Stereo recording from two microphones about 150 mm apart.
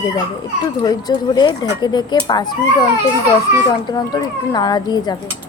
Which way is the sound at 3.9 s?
25° left (ahead or behind).